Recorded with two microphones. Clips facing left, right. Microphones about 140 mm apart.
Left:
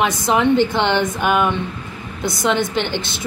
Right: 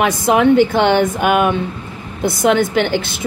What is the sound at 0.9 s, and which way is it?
Speech, 50° right (ahead or behind).